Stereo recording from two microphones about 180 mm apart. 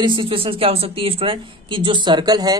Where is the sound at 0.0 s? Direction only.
25° right (ahead or behind).